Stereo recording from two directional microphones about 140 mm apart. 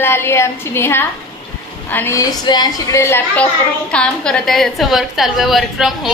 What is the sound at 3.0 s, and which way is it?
Speech, 15° left (ahead or behind).